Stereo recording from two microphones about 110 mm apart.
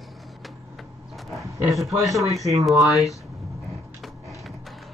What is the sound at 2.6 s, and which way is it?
Speech, centre (ahead or behind).